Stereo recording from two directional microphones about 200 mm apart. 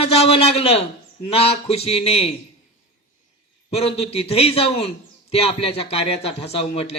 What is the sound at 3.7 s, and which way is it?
A man's voice, 30° left (ahead or behind).